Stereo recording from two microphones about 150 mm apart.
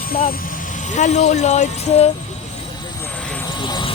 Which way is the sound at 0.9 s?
50° left (ahead or behind).